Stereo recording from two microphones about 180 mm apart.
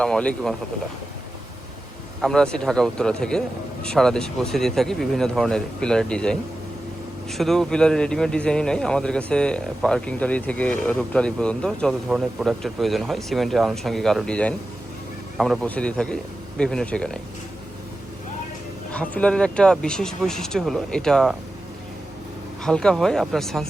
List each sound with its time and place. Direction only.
0.0 s a man's voice: 5° left (ahead or behind)
2.2 s a man's voice: 5° left (ahead or behind)
18.9 s a man's voice: 5° left (ahead or behind)
22.6 s a man's voice: 5° left (ahead or behind)